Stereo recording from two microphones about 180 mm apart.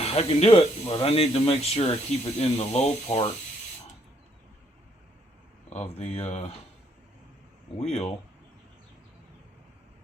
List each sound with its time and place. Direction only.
0.0 s speech: 35° left (ahead or behind)
5.7 s speech: 35° left (ahead or behind)
7.8 s speech: 40° left (ahead or behind)